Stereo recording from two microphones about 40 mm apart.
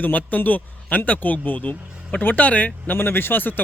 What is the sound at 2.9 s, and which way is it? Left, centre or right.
Speech, left.